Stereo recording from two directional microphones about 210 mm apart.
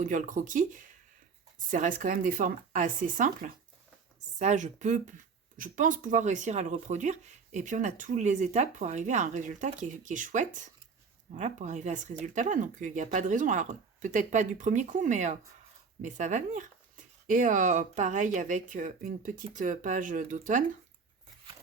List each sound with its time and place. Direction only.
0.0 s speech: 40° right (ahead or behind)